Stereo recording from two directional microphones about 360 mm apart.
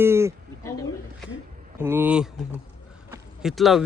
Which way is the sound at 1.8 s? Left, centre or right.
Centre.